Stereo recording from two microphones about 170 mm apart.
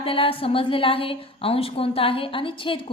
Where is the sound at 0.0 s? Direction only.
35° left (ahead or behind).